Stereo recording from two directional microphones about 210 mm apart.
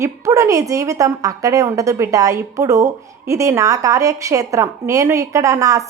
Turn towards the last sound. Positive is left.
turn(degrees=-15)  # may be behind; listen again after turning